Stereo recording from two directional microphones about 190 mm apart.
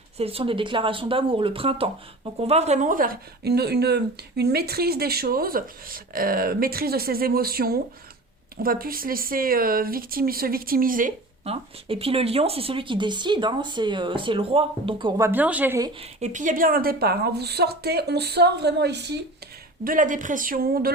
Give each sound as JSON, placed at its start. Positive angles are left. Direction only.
{"t": 0.2, "sound": "speech", "side_deg": -30}
{"t": 11.4, "sound": "speech", "side_deg": -30}
{"t": 15.3, "sound": "a woman's voice", "side_deg": -10}
{"t": 16.0, "sound": "speech", "side_deg": -40}
{"t": 19.8, "sound": "speech", "side_deg": -45}